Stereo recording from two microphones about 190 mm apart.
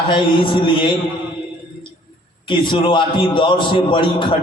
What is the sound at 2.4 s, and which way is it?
A man's voice, 25° left (ahead or behind).